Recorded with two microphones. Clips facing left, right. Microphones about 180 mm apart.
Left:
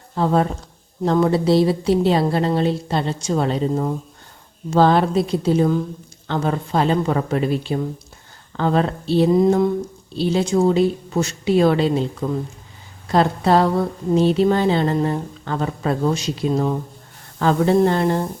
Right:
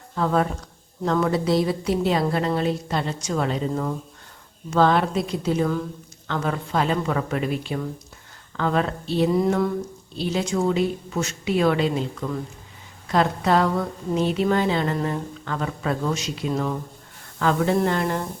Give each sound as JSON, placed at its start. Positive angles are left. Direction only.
{"t": 0.2, "sound": "a woman's voice", "side_deg": 30}
{"t": 10.2, "sound": "a woman's voice", "side_deg": 30}
{"t": 16.5, "sound": "a woman's voice", "side_deg": 25}